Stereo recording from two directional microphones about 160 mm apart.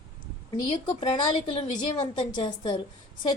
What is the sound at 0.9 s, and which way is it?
A woman's voice, 35° left (ahead or behind).